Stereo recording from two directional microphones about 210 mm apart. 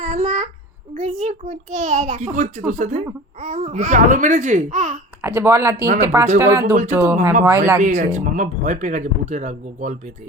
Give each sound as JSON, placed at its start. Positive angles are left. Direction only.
{"t": 0.0, "sound": "child singing", "side_deg": -35}
{"t": 0.9, "sound": "speech", "side_deg": -35}
{"t": 5.2, "sound": "speech", "side_deg": -10}
{"t": 7.8, "sound": "speech", "side_deg": -40}